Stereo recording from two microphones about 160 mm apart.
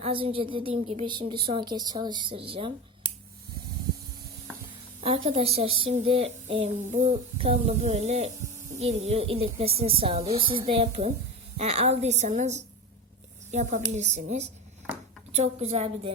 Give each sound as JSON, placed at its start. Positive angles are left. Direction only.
{"t": 0.0, "sound": "speech", "side_deg": -35}
{"t": 4.9, "sound": "a woman's voice", "side_deg": -35}